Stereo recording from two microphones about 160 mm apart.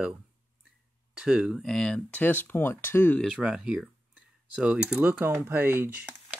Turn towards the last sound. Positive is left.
turn(degrees=-10)  # may be behind; listen again after turning